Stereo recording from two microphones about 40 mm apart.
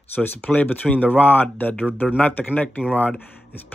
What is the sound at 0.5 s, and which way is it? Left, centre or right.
Speech, left.